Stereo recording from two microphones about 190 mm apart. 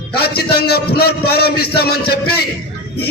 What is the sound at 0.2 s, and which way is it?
A man's voice, 55° left (ahead or behind).